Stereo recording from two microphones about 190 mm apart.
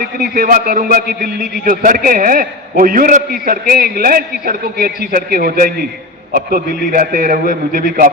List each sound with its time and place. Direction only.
0.0 s a man's voice: 50° right (ahead or behind)